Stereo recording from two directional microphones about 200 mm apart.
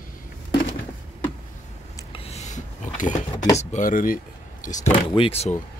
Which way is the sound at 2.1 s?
30° left (ahead or behind).